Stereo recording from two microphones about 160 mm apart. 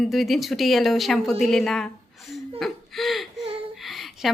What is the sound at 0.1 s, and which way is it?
A woman's voice, centre (ahead or behind).